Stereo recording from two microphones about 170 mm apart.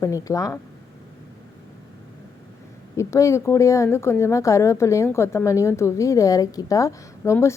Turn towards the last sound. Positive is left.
turn(degrees=15)  # may be behind; listen again after turning